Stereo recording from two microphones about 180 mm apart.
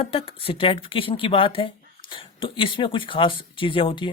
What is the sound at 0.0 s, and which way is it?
Speech, 30° left (ahead or behind).